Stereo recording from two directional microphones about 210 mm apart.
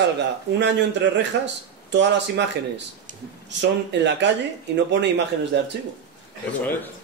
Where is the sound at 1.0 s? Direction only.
55° right (ahead or behind).